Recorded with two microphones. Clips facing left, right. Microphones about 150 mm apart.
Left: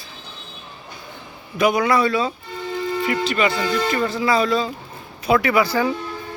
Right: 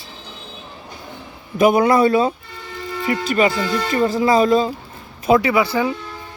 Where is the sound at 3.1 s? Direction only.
35° right (ahead or behind).